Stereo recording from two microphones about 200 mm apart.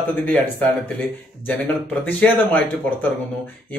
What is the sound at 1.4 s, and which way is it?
Speech, 10° left (ahead or behind).